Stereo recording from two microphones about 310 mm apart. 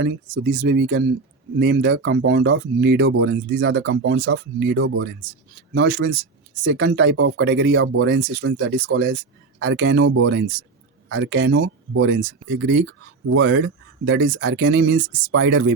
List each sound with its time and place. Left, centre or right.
0.0 s speech: right